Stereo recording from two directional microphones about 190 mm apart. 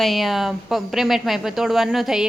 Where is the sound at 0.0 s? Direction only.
Centre (ahead or behind).